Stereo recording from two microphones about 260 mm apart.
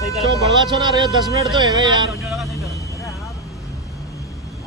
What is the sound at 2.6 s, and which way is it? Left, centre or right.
Vehicle, centre.